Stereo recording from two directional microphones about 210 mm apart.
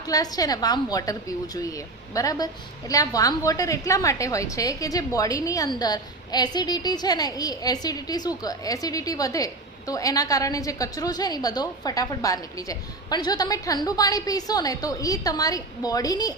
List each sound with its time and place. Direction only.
0.1 s a woman's voice: 15° left (ahead or behind)